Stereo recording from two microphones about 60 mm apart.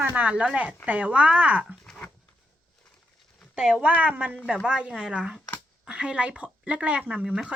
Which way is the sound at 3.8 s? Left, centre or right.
Right.